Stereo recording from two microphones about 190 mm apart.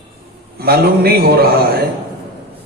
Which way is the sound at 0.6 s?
55° right (ahead or behind).